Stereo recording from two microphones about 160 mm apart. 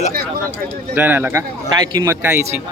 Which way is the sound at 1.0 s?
10° right (ahead or behind).